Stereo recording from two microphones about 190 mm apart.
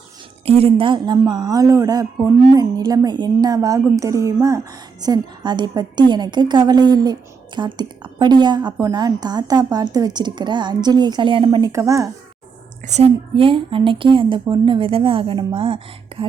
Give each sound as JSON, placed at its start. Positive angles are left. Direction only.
{"t": 0.4, "sound": "a woman's voice", "side_deg": -30}
{"t": 12.8, "sound": "a woman's voice", "side_deg": -35}